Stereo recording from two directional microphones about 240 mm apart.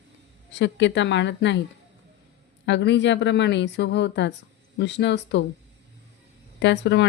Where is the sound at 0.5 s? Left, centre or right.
Left.